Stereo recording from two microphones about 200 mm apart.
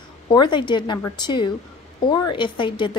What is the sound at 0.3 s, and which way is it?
A woman's voice, 20° left (ahead or behind).